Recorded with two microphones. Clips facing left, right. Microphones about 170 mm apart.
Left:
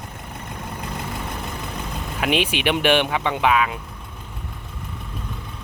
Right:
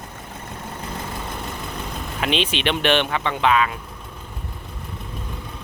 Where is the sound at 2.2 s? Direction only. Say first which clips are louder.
Left 1 dB; 10° left (ahead or behind).